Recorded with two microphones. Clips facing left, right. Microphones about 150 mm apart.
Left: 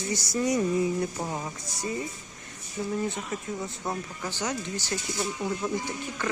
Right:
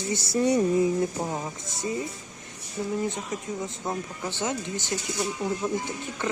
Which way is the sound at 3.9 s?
20° right (ahead or behind).